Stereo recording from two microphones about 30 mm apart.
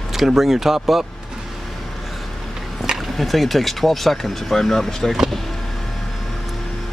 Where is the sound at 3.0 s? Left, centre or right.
Centre.